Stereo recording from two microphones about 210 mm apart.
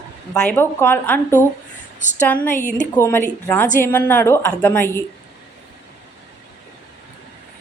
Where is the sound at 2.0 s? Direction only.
35° left (ahead or behind).